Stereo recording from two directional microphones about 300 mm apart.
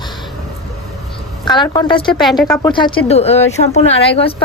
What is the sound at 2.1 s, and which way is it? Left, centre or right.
Speech, centre.